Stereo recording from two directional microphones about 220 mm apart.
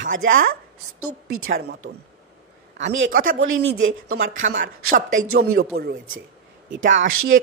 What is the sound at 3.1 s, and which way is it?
Speech, 40° right (ahead or behind).